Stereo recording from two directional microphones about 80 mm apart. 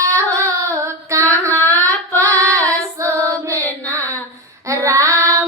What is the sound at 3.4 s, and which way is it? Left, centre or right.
Music, right.